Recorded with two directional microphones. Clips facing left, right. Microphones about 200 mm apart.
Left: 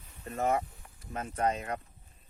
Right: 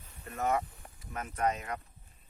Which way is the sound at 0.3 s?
30° left (ahead or behind).